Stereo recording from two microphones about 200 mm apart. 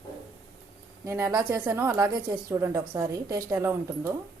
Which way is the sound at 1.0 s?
15° right (ahead or behind).